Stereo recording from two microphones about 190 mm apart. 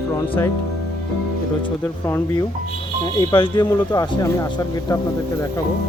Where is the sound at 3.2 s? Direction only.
25° left (ahead or behind).